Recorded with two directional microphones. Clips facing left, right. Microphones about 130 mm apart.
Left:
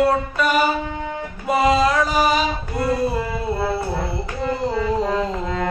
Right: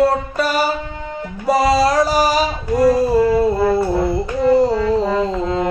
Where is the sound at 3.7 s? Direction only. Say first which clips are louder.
Right 8 dB; 40° right (ahead or behind).